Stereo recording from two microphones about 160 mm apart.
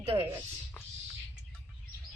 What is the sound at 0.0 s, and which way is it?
Speech, 35° right (ahead or behind).